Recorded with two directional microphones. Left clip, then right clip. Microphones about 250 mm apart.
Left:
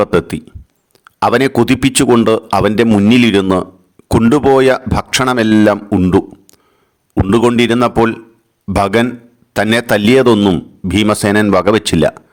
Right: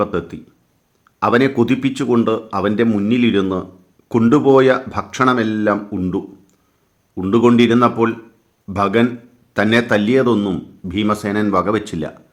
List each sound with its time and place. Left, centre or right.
0.0 s a man's voice: left